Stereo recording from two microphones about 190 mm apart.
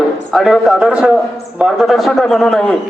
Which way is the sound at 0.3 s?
Centre (ahead or behind).